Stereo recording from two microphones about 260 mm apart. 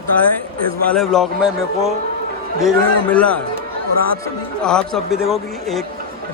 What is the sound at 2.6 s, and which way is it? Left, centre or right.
Speech, centre.